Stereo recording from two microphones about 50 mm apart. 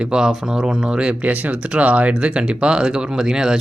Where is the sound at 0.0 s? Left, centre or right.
Centre.